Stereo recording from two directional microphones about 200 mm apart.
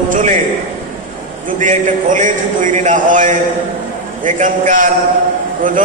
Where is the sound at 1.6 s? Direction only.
40° right (ahead or behind).